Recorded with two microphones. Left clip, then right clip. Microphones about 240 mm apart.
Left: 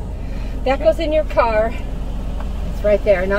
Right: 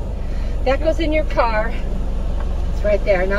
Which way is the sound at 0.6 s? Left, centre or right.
Left.